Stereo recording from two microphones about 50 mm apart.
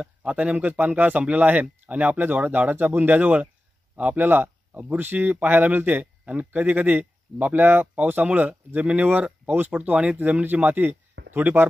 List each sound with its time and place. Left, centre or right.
0.0 s speech: right